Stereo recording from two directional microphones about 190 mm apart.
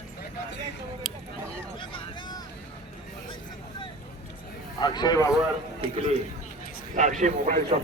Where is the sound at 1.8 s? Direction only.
25° left (ahead or behind).